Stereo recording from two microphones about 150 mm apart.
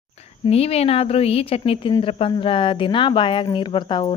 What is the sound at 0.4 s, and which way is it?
A woman's voice, 40° left (ahead or behind).